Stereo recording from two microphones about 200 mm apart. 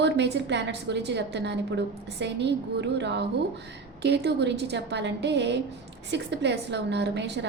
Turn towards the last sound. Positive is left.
turn(degrees=-60)  # may be behind; listen again after turning